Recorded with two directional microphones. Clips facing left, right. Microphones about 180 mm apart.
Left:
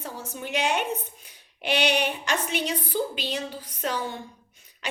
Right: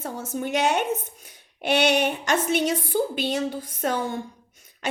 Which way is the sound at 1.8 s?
45° right (ahead or behind).